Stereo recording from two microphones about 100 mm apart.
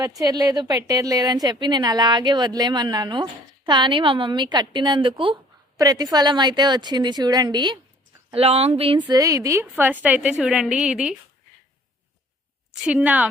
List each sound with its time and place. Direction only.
0.2 s a woman's voice: 40° right (ahead or behind); by 5.4 s 60° right (ahead or behind)
5.7 s a woman's voice: 40° right (ahead or behind)
8.3 s a woman's voice: 75° right (ahead or behind)
9.0 s a woman's voice: 35° right (ahead or behind); by 11.2 s 5° right (ahead or behind)
12.8 s a woman's voice: 15° right (ahead or behind)